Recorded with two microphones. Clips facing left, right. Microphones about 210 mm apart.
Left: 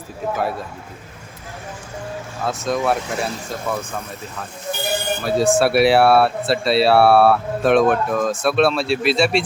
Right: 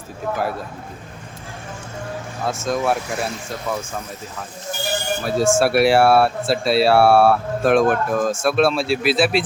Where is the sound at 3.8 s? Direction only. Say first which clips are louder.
Left 1 dB; 60° left (ahead or behind).